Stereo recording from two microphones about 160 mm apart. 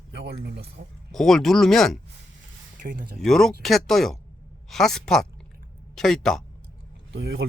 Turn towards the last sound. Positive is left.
turn(degrees=-90)